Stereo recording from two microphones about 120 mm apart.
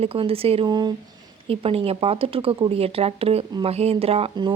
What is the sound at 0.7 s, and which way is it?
Speech, 35° right (ahead or behind).